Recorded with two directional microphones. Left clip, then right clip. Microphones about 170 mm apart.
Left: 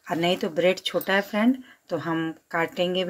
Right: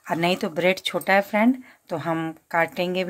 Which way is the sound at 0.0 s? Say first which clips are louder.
Right 1 dB; 35° right (ahead or behind).